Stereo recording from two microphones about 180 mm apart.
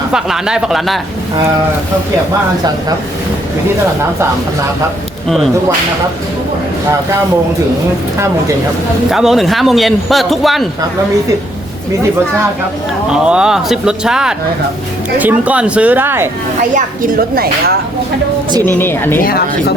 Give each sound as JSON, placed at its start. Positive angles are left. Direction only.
{"t": 0.1, "sound": "speech", "side_deg": -5}
{"t": 9.0, "sound": "speech", "side_deg": 0}
{"t": 13.1, "sound": "speech", "side_deg": -5}
{"t": 16.7, "sound": "a woman's voice", "side_deg": -50}
{"t": 18.6, "sound": "speech", "side_deg": 10}
{"t": 19.2, "sound": "speech", "side_deg": 60}